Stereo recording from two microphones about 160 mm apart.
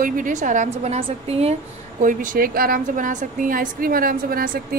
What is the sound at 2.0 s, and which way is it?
A woman's voice, 55° right (ahead or behind).